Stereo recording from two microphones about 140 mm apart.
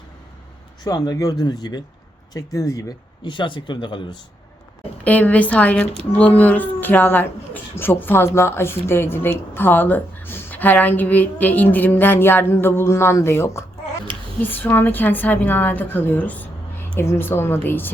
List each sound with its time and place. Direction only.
0.9 s speech: 25° left (ahead or behind)
3.2 s speech: 35° left (ahead or behind)
5.0 s a woman's voice: 10° left (ahead or behind)